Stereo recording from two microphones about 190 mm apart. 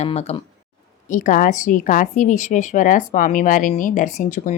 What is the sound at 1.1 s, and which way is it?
A woman's voice, 45° left (ahead or behind).